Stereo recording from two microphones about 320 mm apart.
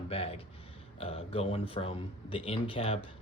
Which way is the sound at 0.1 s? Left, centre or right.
Centre.